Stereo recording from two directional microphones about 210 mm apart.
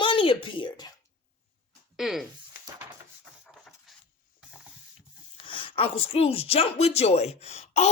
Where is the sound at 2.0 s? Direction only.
Centre (ahead or behind).